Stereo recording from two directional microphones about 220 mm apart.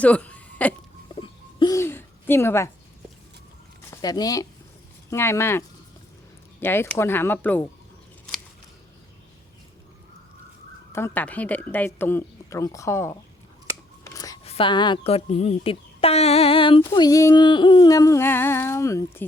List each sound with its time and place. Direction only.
0.0 s hiccup: 5° left (ahead or behind)
1.0 s a sound: 20° left (ahead or behind)
4.0 s speech: 15° left (ahead or behind)
10.9 s speech: 10° left (ahead or behind)
14.0 s scissors: 15° left (ahead or behind)
14.4 s speech: 25° left (ahead or behind)